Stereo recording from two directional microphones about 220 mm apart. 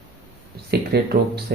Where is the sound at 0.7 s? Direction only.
45° right (ahead or behind).